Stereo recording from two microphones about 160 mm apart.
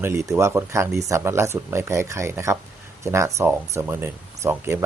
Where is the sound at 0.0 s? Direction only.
20° right (ahead or behind).